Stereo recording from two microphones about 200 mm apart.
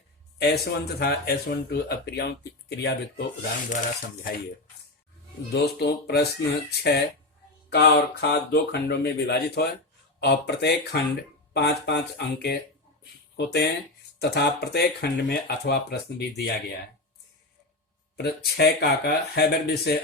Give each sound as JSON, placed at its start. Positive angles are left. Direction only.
{"t": 0.3, "sound": "speech", "side_deg": 55}
{"t": 3.7, "sound": "speech", "side_deg": 40}
{"t": 5.6, "sound": "speech", "side_deg": 55}
{"t": 18.2, "sound": "speech", "side_deg": 55}